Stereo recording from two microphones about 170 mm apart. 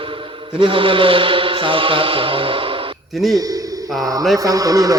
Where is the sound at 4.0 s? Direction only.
20° right (ahead or behind).